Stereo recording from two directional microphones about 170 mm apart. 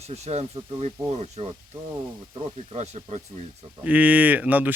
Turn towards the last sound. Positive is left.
turn(degrees=-10)  # may be behind; listen again after turning